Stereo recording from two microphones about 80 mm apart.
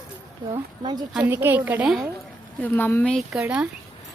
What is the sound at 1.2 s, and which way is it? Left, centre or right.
Speech, right.